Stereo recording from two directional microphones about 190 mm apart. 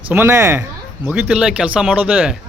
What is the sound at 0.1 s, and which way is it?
Speech, 10° right (ahead or behind).